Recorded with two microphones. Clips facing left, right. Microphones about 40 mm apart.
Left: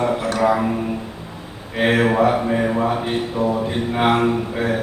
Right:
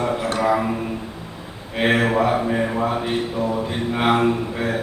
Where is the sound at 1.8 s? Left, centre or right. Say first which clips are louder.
Left 2 dB; centre.